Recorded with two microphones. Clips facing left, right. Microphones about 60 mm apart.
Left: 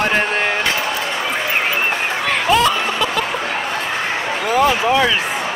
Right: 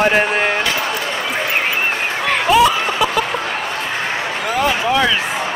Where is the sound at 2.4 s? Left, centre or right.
Centre.